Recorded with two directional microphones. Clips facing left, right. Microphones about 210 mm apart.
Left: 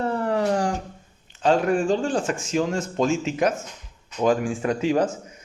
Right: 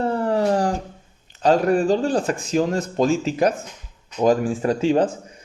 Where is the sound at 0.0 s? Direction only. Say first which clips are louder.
Right 3 dB; 35° right (ahead or behind).